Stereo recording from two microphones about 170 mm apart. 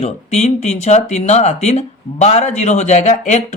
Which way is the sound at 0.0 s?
40° left (ahead or behind).